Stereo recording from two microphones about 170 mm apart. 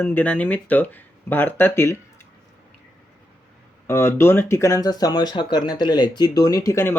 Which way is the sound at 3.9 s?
15° left (ahead or behind).